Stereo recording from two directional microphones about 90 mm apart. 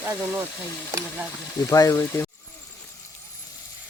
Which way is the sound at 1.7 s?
40° left (ahead or behind).